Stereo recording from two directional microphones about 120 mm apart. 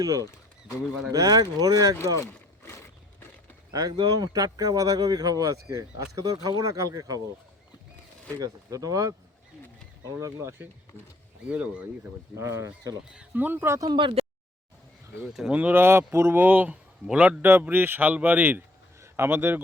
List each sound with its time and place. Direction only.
0.0 s speech: 30° right (ahead or behind)
2.2 s rowboat: 25° left (ahead or behind)
3.7 s speech: 30° right (ahead or behind)
8.4 s speech: 30° right (ahead or behind)
11.4 s speech: 10° right (ahead or behind)
12.4 s speech: 25° right (ahead or behind)
13.1 s speech: 15° right (ahead or behind)
13.8 s speech: 40° right (ahead or behind)
15.3 s speech: 5° right (ahead or behind)